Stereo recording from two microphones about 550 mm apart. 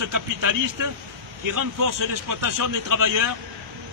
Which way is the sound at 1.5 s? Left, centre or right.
Right.